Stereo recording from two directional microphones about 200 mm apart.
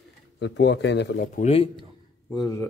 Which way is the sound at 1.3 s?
30° left (ahead or behind).